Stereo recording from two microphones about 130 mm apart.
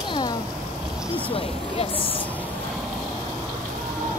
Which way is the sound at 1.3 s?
45° left (ahead or behind).